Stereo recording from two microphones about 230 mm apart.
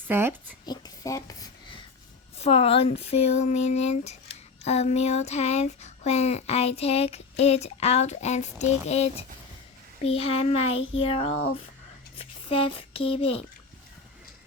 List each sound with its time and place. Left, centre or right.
0.1 s speech: centre
1.0 s a sound: centre
2.4 s speech: left